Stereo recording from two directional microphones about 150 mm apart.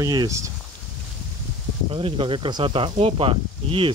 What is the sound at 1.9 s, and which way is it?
Speech, 35° right (ahead or behind).